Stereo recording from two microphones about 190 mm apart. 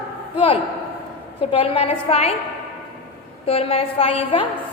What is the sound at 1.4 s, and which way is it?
Speech, 30° left (ahead or behind).